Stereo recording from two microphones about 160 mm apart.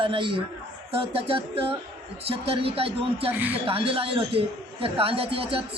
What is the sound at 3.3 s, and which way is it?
Speech, 10° right (ahead or behind).